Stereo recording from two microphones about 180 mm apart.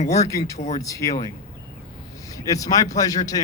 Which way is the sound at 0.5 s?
40° left (ahead or behind).